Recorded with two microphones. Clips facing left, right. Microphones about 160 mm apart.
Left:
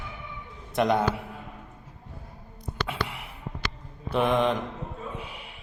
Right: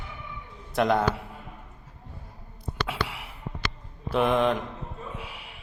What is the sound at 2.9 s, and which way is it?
Whispering, 5° right (ahead or behind).